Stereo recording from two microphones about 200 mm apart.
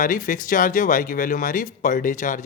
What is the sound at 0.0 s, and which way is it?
Speech, 40° left (ahead or behind).